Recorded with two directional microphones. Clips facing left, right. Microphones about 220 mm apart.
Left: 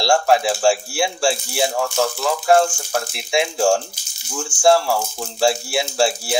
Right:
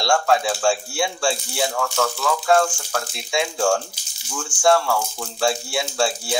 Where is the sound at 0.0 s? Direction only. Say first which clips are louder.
Left 3 dB; 25° left (ahead or behind).